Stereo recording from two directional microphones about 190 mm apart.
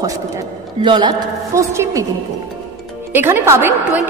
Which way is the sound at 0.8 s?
25° right (ahead or behind).